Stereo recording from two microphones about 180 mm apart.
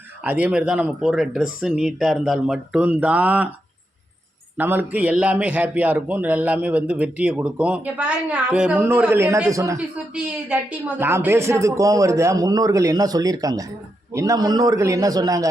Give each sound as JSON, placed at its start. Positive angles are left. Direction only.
{"t": 0.3, "sound": "speech", "side_deg": -5}
{"t": 4.5, "sound": "a man's voice", "side_deg": -10}
{"t": 10.2, "sound": "a man's voice", "side_deg": -5}